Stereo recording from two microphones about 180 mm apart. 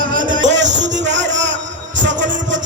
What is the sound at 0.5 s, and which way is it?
Music, 80° right.